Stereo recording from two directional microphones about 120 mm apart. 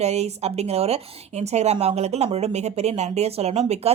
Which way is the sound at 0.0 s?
65° right (ahead or behind).